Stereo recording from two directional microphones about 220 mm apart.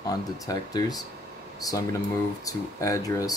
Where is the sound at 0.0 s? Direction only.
15° left (ahead or behind).